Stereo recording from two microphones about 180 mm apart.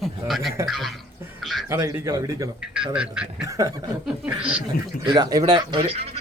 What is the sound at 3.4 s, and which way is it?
Speech, 15° right (ahead or behind).